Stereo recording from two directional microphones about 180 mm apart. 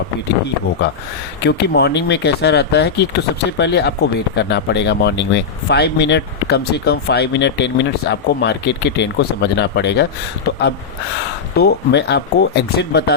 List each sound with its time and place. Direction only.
1.5 s speech: 65° left (ahead or behind)